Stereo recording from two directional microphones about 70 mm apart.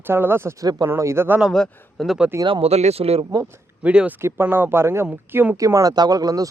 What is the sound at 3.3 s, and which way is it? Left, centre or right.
Speech, right.